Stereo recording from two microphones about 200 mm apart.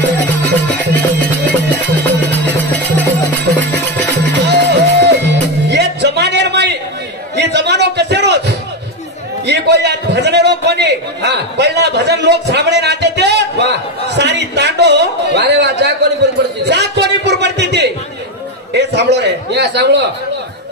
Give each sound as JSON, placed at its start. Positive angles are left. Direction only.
{"t": 0.0, "sound": "music", "side_deg": 10}
{"t": 4.3, "sound": "music", "side_deg": -60}
{"t": 7.3, "sound": "a sound", "side_deg": -60}